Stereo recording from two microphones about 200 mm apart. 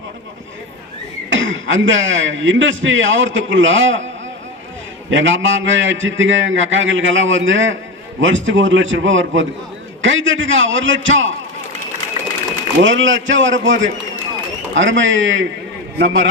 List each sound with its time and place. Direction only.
1.3 s speech: 70° right (ahead or behind)
5.1 s speech: 70° right (ahead or behind)
12.8 s speech: 70° right (ahead or behind)